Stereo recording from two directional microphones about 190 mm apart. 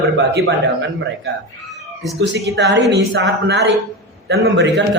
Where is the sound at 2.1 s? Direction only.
65° right (ahead or behind).